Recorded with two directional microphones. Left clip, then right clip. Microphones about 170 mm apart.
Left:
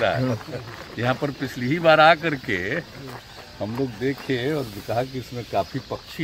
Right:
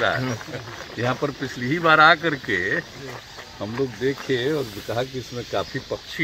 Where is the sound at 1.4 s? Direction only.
40° left (ahead or behind).